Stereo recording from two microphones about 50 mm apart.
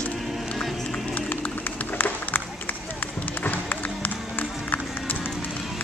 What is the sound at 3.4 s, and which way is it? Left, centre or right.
Music, left.